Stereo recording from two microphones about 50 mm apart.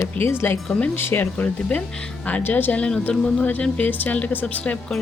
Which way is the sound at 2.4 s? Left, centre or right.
Left.